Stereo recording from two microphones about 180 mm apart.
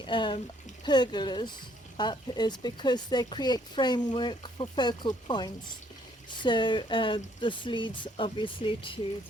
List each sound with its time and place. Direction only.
0.0 s speech: 25° left (ahead or behind)